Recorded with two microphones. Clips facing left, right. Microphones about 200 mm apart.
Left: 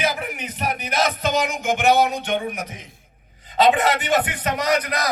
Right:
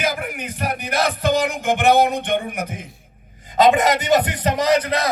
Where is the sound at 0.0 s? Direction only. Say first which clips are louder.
Right 1 dB; 50° right (ahead or behind).